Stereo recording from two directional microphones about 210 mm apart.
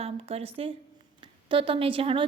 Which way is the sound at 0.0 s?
30° right (ahead or behind).